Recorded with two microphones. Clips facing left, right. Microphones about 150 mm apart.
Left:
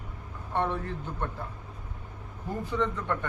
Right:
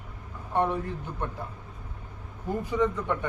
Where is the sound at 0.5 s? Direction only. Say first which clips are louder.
Right 3 dB; 10° right (ahead or behind).